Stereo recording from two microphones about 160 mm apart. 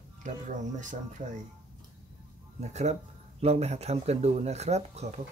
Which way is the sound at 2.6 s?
45° right (ahead or behind).